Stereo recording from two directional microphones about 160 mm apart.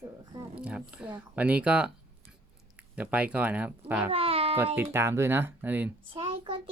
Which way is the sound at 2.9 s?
10° right (ahead or behind).